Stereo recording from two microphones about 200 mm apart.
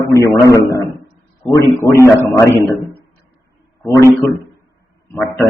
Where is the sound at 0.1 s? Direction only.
15° left (ahead or behind).